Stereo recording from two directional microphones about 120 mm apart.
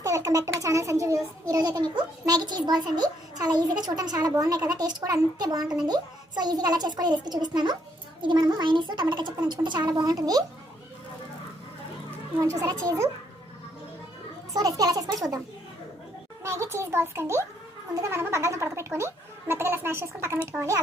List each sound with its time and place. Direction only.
0.0 s a child's voice: 25° right (ahead or behind)
12.4 s speech: 30° right (ahead or behind)
14.5 s a child's voice: 30° right (ahead or behind)
16.4 s speech: 25° right (ahead or behind)